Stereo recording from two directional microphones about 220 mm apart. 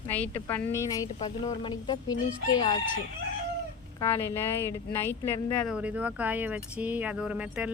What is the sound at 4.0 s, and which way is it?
Speech, 10° left (ahead or behind).